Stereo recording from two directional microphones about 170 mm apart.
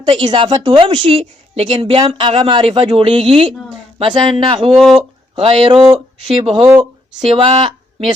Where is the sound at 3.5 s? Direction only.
5° left (ahead or behind).